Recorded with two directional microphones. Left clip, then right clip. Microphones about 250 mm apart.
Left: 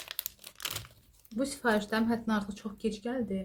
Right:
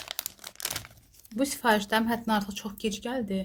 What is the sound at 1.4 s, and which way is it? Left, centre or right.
Speech, right.